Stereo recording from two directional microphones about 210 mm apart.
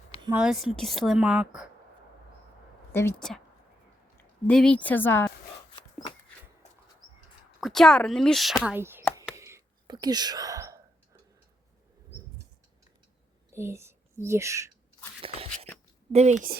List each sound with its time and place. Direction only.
0.3 s speech: centre (ahead or behind)
2.9 s speech: 10° left (ahead or behind)
5.7 s dog: 25° left (ahead or behind)
7.6 s speech: centre (ahead or behind)
9.3 s whispering: 15° right (ahead or behind)
13.5 s speech: 10° right (ahead or behind)
16.1 s speech: 35° right (ahead or behind)